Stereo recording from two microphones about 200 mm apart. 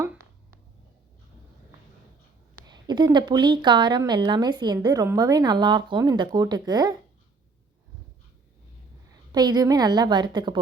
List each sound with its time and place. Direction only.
2.6 s a woman's voice: 20° right (ahead or behind)
9.3 s a woman's voice: 20° right (ahead or behind)